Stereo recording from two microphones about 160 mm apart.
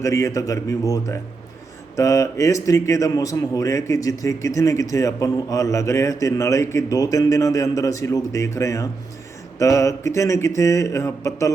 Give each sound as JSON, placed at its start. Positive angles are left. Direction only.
{"t": 0.0, "sound": "a man's voice", "side_deg": 20}